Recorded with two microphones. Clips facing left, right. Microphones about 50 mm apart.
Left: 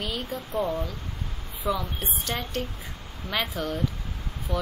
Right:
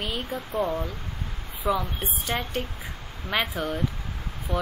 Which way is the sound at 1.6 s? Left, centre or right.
Centre.